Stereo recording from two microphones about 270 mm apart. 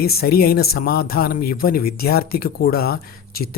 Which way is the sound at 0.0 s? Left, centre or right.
Left.